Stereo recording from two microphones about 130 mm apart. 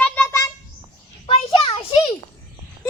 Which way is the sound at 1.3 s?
45° left (ahead or behind).